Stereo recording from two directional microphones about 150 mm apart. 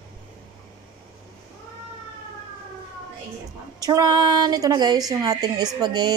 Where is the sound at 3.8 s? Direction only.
25° right (ahead or behind).